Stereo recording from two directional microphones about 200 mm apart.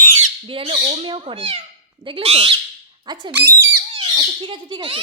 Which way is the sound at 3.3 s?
10° right (ahead or behind).